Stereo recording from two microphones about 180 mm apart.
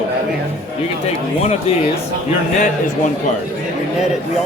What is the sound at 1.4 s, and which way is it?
Speech, 40° left (ahead or behind).